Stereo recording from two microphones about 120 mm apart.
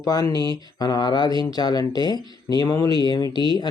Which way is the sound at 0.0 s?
30° left (ahead or behind).